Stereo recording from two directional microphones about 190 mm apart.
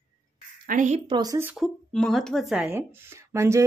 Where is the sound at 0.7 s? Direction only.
40° right (ahead or behind).